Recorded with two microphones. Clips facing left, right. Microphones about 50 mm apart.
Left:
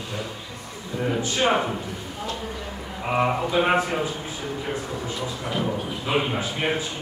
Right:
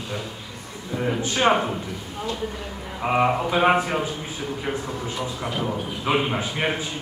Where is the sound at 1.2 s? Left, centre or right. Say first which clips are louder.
Right 3 dB; right.